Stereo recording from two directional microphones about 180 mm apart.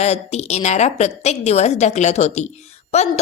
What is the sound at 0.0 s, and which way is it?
A woman's voice, 35° left (ahead or behind).